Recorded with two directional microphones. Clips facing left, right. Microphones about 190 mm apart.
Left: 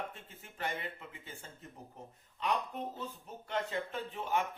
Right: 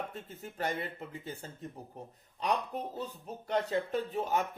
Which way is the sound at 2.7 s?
35° right (ahead or behind).